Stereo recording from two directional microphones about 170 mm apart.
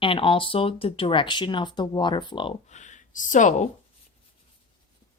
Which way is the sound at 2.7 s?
45° left (ahead or behind).